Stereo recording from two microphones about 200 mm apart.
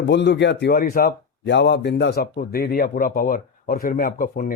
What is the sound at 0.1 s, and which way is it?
A man's voice, 60° left (ahead or behind).